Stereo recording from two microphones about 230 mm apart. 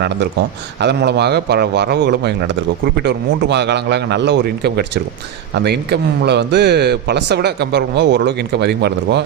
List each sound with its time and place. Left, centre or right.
0.8 s speech: right